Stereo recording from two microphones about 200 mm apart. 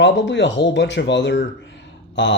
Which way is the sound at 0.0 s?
60° left (ahead or behind).